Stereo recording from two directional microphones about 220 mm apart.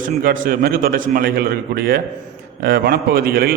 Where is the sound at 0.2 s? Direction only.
40° right (ahead or behind).